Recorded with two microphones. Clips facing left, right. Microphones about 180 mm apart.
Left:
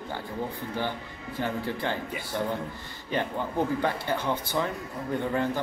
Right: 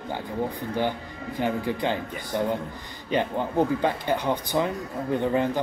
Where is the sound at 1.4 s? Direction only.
15° right (ahead or behind).